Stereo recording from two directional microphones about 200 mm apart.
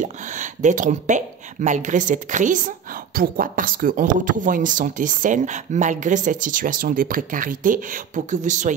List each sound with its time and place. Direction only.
0.0 s speech: 40° right (ahead or behind)